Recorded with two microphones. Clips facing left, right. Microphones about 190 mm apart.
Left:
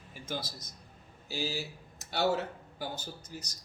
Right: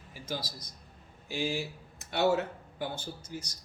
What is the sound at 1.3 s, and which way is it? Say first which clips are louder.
Speech: right 3 dB; 40° left (ahead or behind).